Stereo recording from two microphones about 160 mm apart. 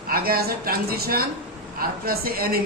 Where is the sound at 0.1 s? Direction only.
70° right (ahead or behind).